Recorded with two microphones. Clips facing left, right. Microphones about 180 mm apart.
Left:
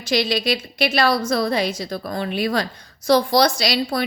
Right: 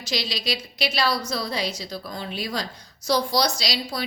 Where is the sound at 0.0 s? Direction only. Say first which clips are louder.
Left 9 dB; 55° left (ahead or behind).